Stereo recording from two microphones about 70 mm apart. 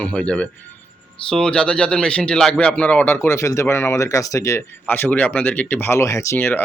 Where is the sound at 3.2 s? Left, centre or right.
Left.